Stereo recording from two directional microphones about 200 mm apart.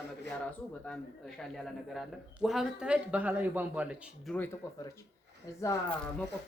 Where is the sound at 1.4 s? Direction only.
Centre (ahead or behind).